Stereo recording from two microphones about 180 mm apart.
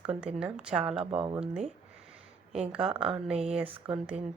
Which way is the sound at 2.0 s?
5° right (ahead or behind).